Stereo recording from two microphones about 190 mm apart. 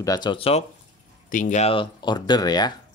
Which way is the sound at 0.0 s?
20° left (ahead or behind).